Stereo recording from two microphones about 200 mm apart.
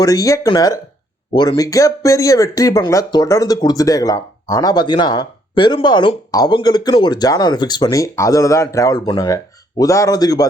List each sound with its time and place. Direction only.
0.0 s speech: 15° left (ahead or behind)